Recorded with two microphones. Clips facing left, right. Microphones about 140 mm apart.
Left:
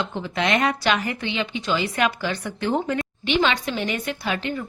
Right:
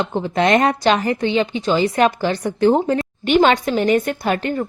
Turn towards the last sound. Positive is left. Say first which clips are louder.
# right 6 dB
turn(degrees=-45)  # may be behind; listen again after turning